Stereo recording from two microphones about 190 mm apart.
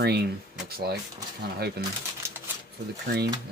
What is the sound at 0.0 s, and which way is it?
Speech, 60° right (ahead or behind).